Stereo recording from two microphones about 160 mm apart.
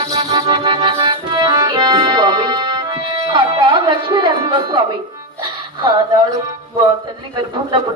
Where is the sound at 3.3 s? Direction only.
30° right (ahead or behind).